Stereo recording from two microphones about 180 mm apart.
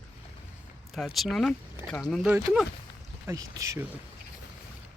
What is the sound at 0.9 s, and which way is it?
Speech, centre (ahead or behind).